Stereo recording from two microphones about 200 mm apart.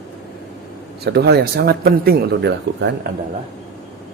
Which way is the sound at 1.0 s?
55° right (ahead or behind).